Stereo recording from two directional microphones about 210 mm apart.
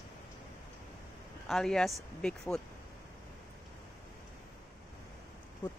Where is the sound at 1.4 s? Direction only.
Centre (ahead or behind).